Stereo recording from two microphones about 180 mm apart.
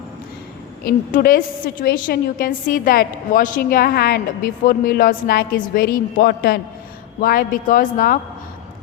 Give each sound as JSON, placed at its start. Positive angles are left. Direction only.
{"t": 0.9, "sound": "a woman's voice", "side_deg": 55}